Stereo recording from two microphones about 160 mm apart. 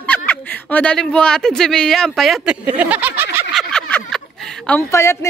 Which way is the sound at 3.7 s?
5° left (ahead or behind).